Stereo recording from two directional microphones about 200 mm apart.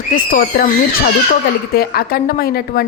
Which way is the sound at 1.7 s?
50° left (ahead or behind).